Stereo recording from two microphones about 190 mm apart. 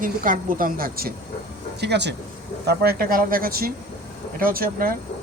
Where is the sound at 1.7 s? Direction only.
60° right (ahead or behind).